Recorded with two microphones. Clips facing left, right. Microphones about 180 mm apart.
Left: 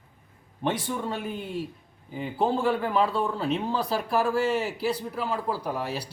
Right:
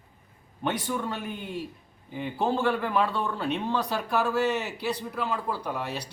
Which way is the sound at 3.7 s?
30° left (ahead or behind).